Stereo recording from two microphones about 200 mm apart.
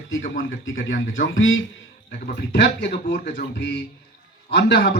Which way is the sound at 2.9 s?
50° left (ahead or behind).